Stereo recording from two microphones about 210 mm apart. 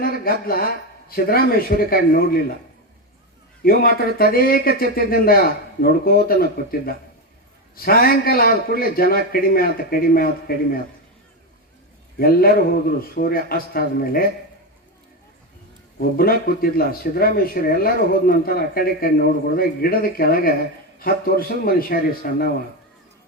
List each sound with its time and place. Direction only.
0.0 s speech: 45° left (ahead or behind)
3.6 s speech: 45° left (ahead or behind)
12.2 s speech: 45° left (ahead or behind)
16.0 s speech: 45° left (ahead or behind)